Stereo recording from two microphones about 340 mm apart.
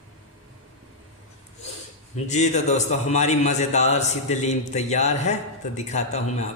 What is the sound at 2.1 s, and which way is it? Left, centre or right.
A man's voice, centre.